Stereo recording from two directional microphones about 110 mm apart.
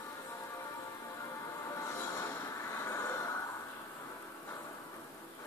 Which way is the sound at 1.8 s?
30° left (ahead or behind).